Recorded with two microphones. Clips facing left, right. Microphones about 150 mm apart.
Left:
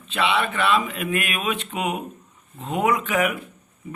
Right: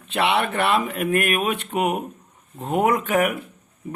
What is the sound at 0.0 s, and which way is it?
A man's voice, 60° right (ahead or behind).